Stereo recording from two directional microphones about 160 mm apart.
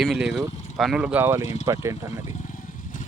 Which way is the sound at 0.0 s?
5° right (ahead or behind).